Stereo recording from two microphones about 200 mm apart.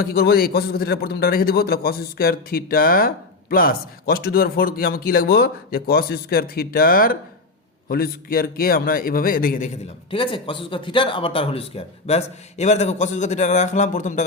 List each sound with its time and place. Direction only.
0.0 s a man's voice: 50° left (ahead or behind)
10.1 s speech: 25° left (ahead or behind)